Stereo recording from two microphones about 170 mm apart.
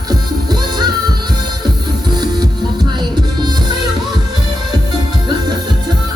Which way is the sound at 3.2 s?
25° right (ahead or behind).